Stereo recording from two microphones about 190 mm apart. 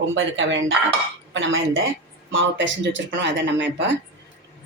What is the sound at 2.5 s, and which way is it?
Speech, 75° right (ahead or behind).